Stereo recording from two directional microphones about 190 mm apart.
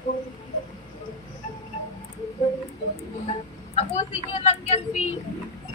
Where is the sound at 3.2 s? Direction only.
35° left (ahead or behind).